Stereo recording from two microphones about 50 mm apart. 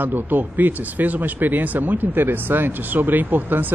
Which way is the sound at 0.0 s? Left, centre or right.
Right.